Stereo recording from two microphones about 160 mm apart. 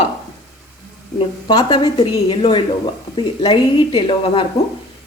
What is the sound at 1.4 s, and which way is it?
Speech, 25° left (ahead or behind).